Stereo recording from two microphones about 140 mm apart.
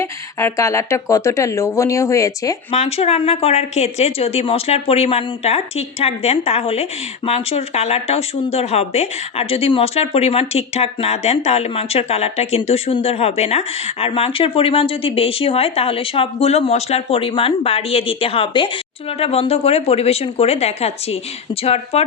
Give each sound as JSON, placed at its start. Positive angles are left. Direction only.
{"t": 0.0, "sound": "speech", "side_deg": 20}
{"t": 2.7, "sound": "speech", "side_deg": 50}